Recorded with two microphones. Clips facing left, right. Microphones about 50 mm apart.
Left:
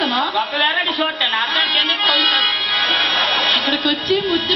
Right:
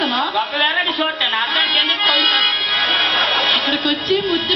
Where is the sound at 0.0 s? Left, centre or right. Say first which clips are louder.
Even; centre.